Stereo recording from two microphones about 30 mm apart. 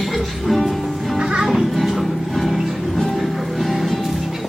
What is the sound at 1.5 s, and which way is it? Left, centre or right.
Music, centre.